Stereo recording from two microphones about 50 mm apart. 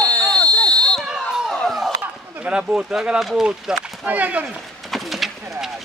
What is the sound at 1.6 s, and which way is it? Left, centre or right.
Chop, centre.